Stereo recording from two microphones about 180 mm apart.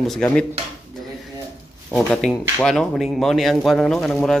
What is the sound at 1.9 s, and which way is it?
A man's voice, 5° left (ahead or behind).